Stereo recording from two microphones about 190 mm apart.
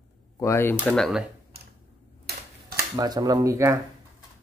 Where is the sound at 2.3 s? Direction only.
55° right (ahead or behind).